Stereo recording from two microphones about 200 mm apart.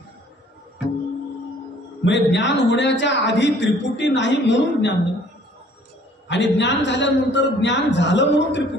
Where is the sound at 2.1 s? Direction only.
60° left (ahead or behind).